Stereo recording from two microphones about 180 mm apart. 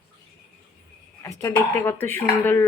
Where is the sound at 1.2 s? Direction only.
20° left (ahead or behind).